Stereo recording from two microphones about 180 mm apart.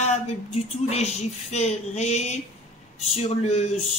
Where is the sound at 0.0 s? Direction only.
40° left (ahead or behind).